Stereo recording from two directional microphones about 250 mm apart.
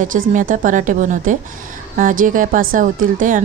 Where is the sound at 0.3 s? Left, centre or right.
Right.